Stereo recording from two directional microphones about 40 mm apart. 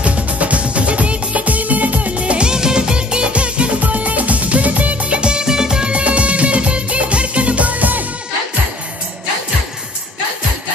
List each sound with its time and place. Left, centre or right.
0.0 s music: right
5.2 s music: centre; by 8.0 s right